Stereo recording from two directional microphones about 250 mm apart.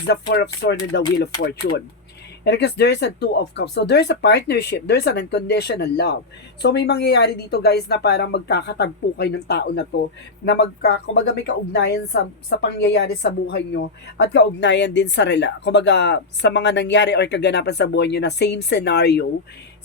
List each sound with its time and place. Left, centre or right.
0.1 s a woman's voice: left